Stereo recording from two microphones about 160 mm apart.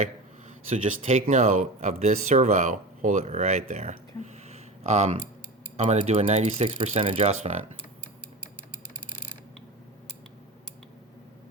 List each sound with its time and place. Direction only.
0.7 s speech: 50° right (ahead or behind)